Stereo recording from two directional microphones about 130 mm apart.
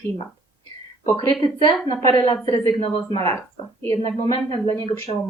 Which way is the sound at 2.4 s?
30° left (ahead or behind).